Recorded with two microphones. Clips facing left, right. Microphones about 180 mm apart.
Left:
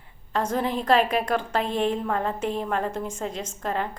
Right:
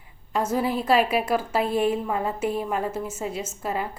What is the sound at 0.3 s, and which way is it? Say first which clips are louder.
A woman's voice: right 1 dB; 5° right (ahead or behind).